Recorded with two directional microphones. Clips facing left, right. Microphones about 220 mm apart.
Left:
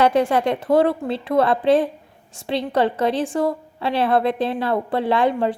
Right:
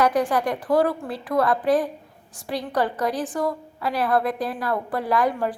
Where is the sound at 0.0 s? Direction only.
25° left (ahead or behind).